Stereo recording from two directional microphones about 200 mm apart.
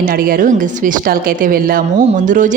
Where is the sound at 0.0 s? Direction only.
45° right (ahead or behind).